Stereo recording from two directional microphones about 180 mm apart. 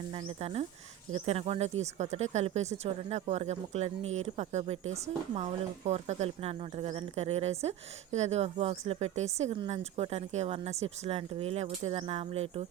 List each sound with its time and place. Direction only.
0.3 s speech: 35° right (ahead or behind)